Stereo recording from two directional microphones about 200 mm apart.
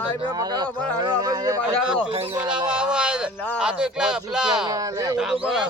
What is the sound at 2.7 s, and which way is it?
Speech, 5° right (ahead or behind).